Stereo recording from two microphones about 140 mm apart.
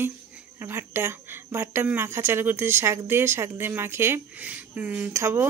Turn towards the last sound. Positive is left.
turn(degrees=-20)  # may be behind; listen again after turning